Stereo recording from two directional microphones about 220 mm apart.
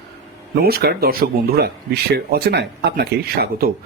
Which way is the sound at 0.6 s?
45° right (ahead or behind).